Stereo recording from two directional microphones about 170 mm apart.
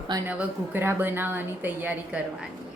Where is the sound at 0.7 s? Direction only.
15° right (ahead or behind).